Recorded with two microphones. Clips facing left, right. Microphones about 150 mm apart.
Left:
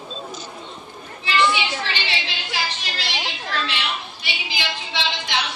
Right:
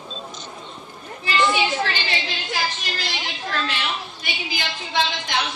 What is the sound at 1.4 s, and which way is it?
A woman's voice, 45° right (ahead or behind).